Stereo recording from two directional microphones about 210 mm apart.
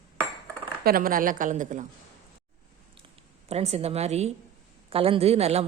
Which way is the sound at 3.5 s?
30° right (ahead or behind).